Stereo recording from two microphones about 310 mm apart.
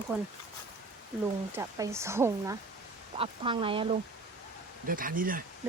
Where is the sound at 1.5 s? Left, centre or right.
Centre; by 5.4 s right.